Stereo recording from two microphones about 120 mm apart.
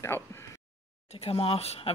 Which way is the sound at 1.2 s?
55° left (ahead or behind).